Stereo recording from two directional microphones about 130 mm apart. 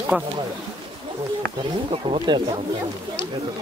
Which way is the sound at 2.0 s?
40° right (ahead or behind).